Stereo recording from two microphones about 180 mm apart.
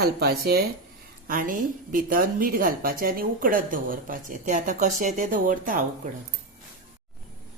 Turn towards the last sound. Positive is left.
turn(degrees=-45)  # may be behind; listen again after turning